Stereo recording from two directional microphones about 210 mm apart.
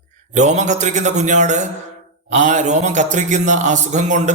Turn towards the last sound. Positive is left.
turn(degrees=-35)  # may be behind; listen again after turning